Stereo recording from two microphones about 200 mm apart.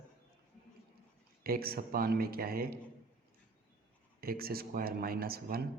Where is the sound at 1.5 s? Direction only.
50° right (ahead or behind).